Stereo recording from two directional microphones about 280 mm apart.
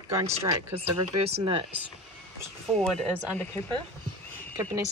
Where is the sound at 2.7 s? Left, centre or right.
Centre.